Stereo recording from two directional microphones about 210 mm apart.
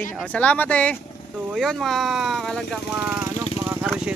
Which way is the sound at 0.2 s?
5° left (ahead or behind).